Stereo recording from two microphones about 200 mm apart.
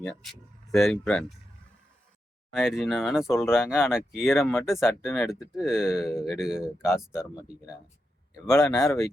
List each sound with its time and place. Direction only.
0.0 s speech: centre (ahead or behind)
2.5 s speech: centre (ahead or behind)
8.4 s speech: 15° left (ahead or behind)